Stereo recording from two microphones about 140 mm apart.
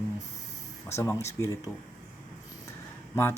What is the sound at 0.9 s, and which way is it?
Speech, 20° left (ahead or behind).